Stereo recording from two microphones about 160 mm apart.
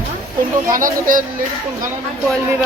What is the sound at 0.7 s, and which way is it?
Speech, 60° right (ahead or behind).